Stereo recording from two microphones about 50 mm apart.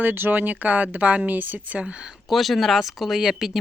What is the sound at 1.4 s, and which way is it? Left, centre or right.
Speech, right.